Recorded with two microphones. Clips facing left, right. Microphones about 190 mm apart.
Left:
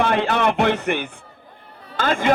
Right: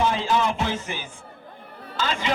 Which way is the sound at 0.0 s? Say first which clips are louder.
Left 3 dB; 65° left (ahead or behind).